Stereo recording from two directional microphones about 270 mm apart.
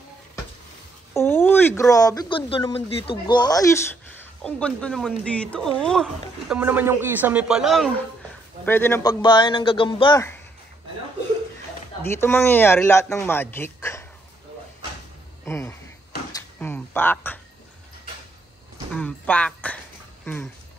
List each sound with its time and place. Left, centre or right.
1.1 s speech: centre
12.0 s speech: centre
15.4 s a sound: centre
18.9 s speech: centre